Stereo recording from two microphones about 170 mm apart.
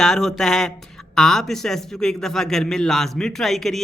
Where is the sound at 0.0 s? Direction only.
Centre (ahead or behind).